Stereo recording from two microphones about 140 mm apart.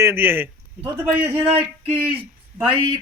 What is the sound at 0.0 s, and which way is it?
Speech, 15° right (ahead or behind).